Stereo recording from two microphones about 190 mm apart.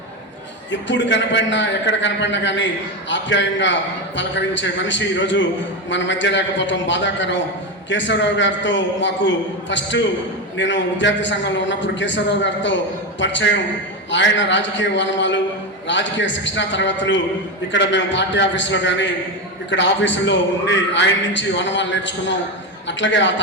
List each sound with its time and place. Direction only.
0.7 s a man's voice: 70° left (ahead or behind)